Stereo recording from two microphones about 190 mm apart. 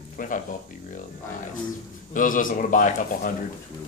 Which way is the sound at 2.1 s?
45° left (ahead or behind).